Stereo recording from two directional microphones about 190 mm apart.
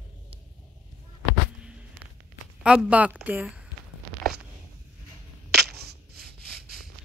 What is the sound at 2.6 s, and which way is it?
A woman's voice, 5° right (ahead or behind).